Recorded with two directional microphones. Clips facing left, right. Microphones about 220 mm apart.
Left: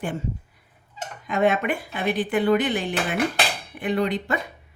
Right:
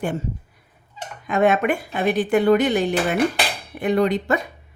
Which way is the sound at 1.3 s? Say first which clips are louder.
Right 3 dB; 50° right (ahead or behind).